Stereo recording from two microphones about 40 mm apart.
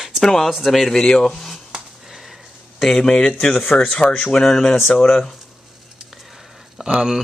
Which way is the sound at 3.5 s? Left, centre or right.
Left.